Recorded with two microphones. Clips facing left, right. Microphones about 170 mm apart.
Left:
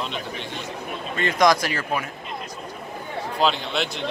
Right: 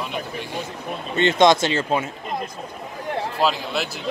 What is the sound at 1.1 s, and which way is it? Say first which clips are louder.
Speech: right 4 dB; 25° right (ahead or behind).